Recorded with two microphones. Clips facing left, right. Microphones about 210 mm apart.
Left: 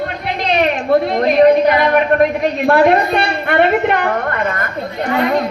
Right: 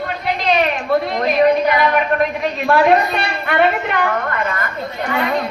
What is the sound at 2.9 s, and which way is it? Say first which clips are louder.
A woman's voice: left 2 dB; 55° left (ahead or behind).